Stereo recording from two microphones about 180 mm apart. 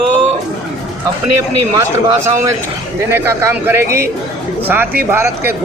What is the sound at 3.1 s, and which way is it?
Speech, 15° right (ahead or behind).